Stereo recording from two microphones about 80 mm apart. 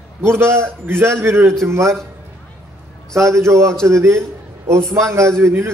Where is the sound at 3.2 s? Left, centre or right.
Right.